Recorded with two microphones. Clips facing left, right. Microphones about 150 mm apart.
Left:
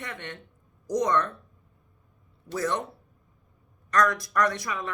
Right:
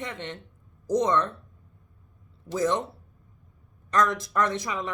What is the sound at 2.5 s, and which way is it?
Speech, 20° right (ahead or behind).